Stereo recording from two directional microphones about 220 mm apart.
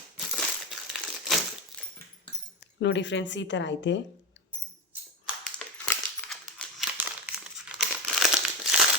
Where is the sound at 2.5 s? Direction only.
55° left (ahead or behind).